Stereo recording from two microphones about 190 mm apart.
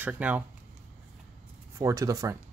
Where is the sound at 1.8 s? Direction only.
20° right (ahead or behind).